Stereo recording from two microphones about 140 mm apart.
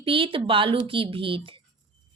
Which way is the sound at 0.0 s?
40° right (ahead or behind).